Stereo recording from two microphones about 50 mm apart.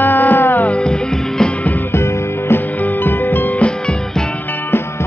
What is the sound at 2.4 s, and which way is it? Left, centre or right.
Music, left.